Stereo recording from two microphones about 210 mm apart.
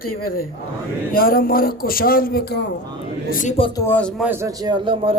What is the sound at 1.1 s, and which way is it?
Speech, 45° left (ahead or behind).